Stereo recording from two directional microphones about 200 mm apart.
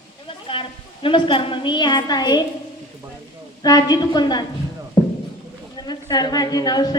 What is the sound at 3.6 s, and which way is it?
Speech, 20° left (ahead or behind).